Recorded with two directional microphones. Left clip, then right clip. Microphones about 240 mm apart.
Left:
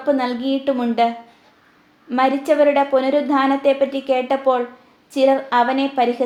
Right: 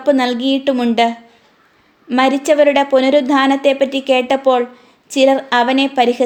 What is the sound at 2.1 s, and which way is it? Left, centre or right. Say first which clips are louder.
A woman's voice: right 4 dB; right.